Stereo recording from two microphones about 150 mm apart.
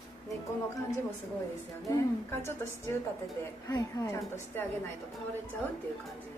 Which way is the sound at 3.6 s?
20° left (ahead or behind).